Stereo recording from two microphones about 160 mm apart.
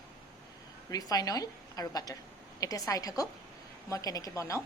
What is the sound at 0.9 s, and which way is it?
A woman's voice, 25° left (ahead or behind).